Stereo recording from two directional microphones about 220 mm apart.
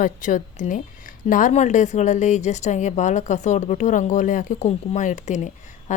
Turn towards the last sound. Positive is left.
turn(degrees=35)  # may be behind; listen again after turning